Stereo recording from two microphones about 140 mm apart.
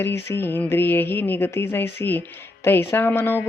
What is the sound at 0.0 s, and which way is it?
A man's voice, 15° left (ahead or behind).